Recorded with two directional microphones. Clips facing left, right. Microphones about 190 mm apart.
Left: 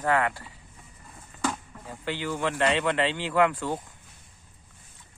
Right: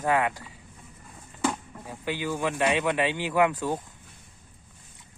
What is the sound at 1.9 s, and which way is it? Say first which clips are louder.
Speech: right 1 dB; 15° right (ahead or behind).